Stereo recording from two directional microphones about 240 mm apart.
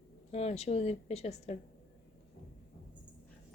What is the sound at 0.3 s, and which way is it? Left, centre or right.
A woman's voice, left.